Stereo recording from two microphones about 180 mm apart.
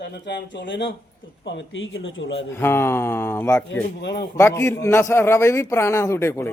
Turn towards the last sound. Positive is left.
turn(degrees=15)  # may be behind; listen again after turning